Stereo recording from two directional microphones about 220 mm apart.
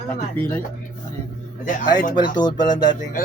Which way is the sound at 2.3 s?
20° left (ahead or behind).